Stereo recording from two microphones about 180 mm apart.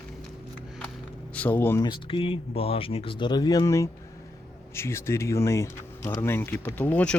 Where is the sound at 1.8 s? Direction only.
25° left (ahead or behind).